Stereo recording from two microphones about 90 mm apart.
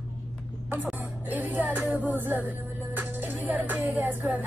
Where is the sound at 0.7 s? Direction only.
20° right (ahead or behind).